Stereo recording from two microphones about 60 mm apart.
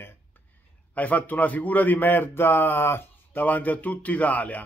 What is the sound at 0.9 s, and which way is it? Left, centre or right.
A man's voice, left.